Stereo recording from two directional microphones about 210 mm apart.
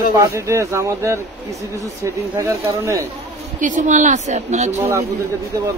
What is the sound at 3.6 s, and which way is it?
A woman's voice, 35° right (ahead or behind).